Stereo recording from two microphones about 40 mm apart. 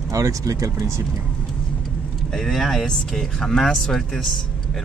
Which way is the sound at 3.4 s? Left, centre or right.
Centre.